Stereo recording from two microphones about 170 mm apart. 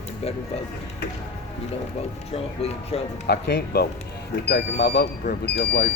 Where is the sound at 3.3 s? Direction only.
80° left.